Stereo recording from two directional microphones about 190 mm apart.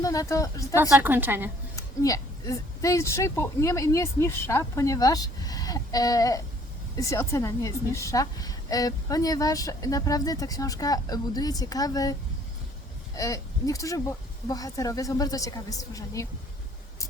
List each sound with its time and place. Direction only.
0.0 s a woman's voice: 15° left (ahead or behind)
0.8 s a woman's voice: 10° right (ahead or behind)
1.7 s a woman's voice: 20° left (ahead or behind)
13.1 s a woman's voice: 15° left (ahead or behind)